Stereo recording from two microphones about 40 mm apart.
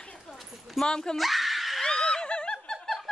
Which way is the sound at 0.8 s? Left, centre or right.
Centre.